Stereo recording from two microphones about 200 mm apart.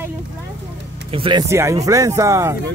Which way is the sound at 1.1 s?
25° right (ahead or behind).